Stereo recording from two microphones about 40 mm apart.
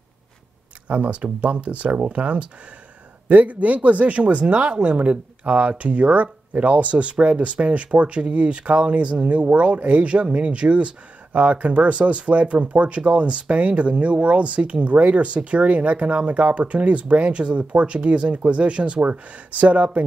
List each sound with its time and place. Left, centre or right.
0.8 s speech: right